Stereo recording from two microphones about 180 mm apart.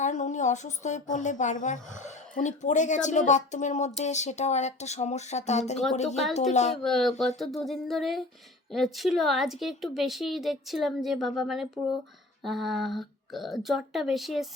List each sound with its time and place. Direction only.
0.0 s speech: 40° left (ahead or behind)
6.8 s a woman's voice: centre (ahead or behind)